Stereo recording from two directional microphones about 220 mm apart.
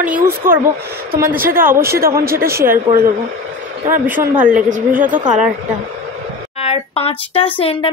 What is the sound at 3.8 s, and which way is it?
Speech, 10° right (ahead or behind).